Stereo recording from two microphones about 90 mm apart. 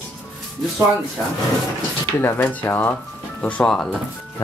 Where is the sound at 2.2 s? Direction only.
25° left (ahead or behind).